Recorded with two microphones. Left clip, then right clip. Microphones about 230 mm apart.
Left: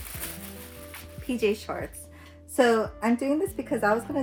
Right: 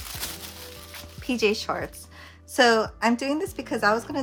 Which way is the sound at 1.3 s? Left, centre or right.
Centre.